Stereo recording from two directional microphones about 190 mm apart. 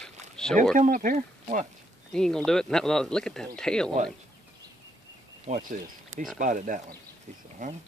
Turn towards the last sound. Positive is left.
turn(degrees=-40)  # may be behind; listen again after turning